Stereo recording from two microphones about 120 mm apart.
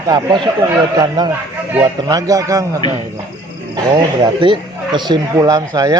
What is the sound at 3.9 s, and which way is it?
Speech, 45° right (ahead or behind).